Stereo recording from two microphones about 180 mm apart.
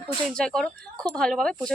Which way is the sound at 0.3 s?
5° left (ahead or behind).